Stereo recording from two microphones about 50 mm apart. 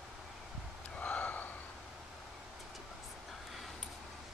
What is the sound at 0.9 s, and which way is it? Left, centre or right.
Gasp, left.